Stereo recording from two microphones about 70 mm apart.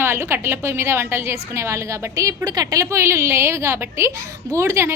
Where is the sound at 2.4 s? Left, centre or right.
Right.